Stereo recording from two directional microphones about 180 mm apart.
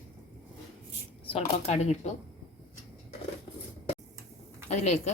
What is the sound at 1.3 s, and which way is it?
Speech, 35° left (ahead or behind).